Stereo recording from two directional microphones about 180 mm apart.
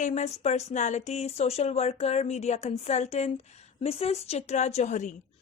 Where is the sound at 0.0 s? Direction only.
40° left (ahead or behind).